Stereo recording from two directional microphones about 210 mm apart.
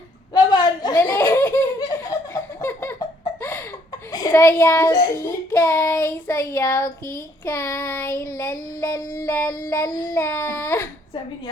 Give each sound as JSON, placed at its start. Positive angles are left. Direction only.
{"t": 0.3, "sound": "belly laugh", "side_deg": 20}
{"t": 2.3, "sound": "a sound", "side_deg": 10}
{"t": 4.1, "sound": "child singing", "side_deg": 15}